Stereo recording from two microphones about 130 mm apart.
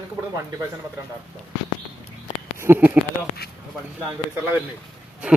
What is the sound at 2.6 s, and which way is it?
Speech, 15° right (ahead or behind).